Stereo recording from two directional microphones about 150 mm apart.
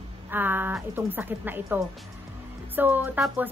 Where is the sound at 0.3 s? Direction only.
15° right (ahead or behind).